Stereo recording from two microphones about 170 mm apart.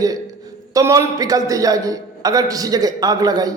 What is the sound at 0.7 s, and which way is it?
A man's voice, 20° right (ahead or behind).